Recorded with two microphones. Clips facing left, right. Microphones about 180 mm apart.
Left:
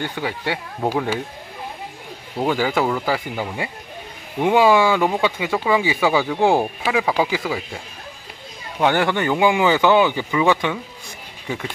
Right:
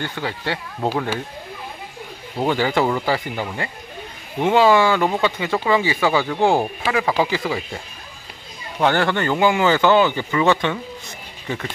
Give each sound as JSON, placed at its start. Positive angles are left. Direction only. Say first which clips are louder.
{"t": 0.0, "sound": "speech", "louder": "left 1 dB", "side_deg": 10}
{"t": 2.3, "sound": "speech", "louder": "right 1 dB", "side_deg": 5}
{"t": 4.4, "sound": "speech", "louder": "even", "side_deg": 10}